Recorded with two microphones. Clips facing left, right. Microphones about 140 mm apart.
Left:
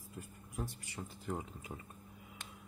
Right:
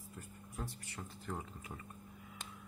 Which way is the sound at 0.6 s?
15° left (ahead or behind).